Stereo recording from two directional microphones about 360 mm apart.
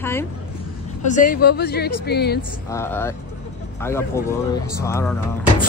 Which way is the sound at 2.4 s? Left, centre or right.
Centre.